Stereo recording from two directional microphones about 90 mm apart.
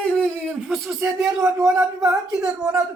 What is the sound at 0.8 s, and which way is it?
Speech, 30° right (ahead or behind).